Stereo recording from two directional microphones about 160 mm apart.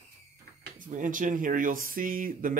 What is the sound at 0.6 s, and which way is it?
Speech, 55° right (ahead or behind).